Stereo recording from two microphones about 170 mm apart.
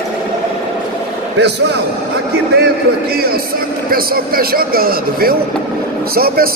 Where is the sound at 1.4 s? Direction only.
80° right.